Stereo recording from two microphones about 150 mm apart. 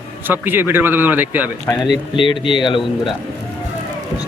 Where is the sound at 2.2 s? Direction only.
35° left (ahead or behind).